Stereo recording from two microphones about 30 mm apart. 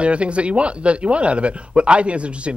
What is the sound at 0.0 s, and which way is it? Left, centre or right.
Speech, right.